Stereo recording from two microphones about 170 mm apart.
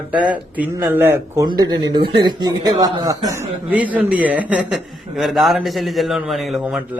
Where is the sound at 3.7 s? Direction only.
10° right (ahead or behind).